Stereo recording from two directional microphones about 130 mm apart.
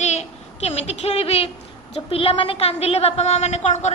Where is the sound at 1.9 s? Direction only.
45° left (ahead or behind).